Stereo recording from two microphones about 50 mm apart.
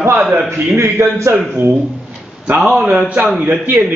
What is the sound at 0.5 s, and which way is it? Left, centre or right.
Speech, right.